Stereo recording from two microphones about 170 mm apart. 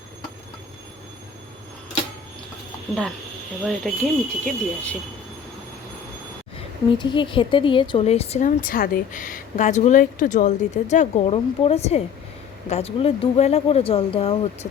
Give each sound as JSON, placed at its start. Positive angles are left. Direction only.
{"t": 3.6, "sound": "speech", "side_deg": 0}
{"t": 7.0, "sound": "speech", "side_deg": 30}